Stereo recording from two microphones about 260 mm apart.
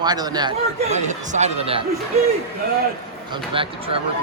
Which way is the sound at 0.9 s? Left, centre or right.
Right.